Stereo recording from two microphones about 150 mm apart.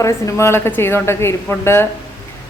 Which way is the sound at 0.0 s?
20° left (ahead or behind).